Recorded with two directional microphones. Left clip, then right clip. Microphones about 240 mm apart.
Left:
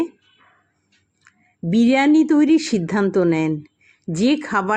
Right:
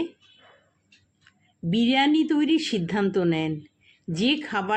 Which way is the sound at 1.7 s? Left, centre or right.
Centre.